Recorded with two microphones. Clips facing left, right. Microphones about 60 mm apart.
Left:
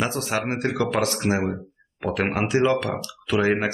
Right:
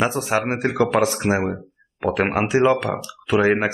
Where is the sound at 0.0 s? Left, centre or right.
Centre.